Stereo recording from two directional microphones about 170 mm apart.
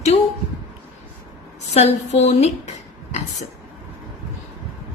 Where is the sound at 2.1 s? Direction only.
40° left (ahead or behind).